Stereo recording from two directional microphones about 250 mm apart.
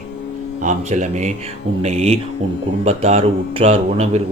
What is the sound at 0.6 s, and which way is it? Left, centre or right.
A man's voice, right.